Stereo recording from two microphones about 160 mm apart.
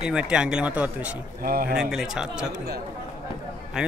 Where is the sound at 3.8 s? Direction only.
5° right (ahead or behind).